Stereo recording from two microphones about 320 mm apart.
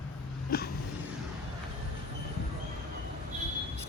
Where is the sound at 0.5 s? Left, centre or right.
Left.